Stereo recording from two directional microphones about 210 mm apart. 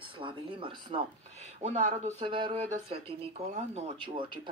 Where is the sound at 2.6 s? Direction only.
35° right (ahead or behind).